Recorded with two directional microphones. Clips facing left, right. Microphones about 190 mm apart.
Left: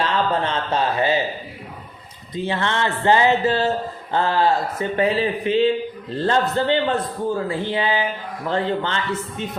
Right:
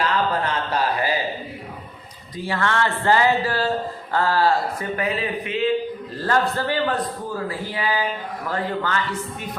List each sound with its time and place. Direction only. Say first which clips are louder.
0.0 s speech: left 1 dB; 25° left (ahead or behind)
2.3 s speech: left 1 dB; 20° left (ahead or behind)